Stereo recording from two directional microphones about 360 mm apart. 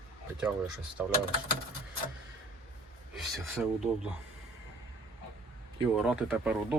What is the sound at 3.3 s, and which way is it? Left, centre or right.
Speech, centre.